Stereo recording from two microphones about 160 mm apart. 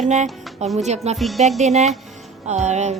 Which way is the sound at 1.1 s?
Centre (ahead or behind).